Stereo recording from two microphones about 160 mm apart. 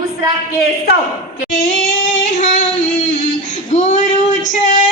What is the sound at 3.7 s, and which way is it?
Female singing, 50° left (ahead or behind).